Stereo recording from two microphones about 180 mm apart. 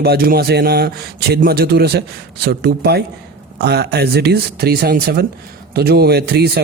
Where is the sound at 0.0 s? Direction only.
60° right (ahead or behind).